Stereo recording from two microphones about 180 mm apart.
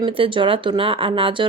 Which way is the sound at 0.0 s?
30° right (ahead or behind).